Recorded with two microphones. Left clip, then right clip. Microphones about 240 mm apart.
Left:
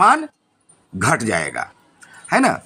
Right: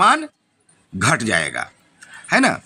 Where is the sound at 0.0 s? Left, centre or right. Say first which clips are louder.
Left 1 dB; centre.